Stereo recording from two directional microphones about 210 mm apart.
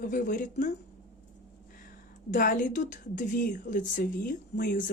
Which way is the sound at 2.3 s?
40° left (ahead or behind).